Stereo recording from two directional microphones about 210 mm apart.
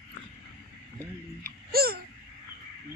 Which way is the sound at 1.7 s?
45° right (ahead or behind).